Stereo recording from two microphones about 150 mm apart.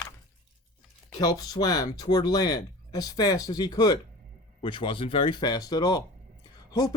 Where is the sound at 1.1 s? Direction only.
25° left (ahead or behind).